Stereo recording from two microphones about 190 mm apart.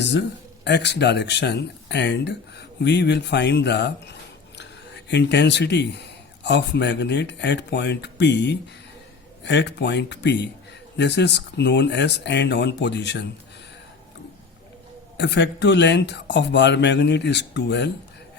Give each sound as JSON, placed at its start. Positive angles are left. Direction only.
{"t": 0.0, "sound": "a man's voice", "side_deg": 65}
{"t": 15.2, "sound": "a man's voice", "side_deg": 65}